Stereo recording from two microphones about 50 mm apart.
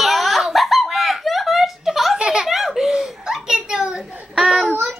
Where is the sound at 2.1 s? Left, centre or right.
Centre.